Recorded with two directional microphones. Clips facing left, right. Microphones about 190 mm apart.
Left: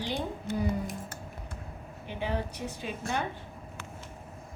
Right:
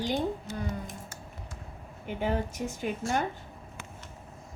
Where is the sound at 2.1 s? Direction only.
45° right (ahead or behind).